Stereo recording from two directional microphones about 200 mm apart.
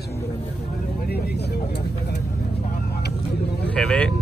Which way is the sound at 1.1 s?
55° left (ahead or behind).